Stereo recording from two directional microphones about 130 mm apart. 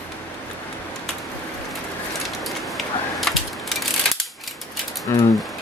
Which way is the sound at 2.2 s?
Centre (ahead or behind).